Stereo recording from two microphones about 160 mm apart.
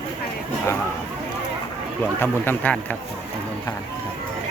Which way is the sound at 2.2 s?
10° left (ahead or behind).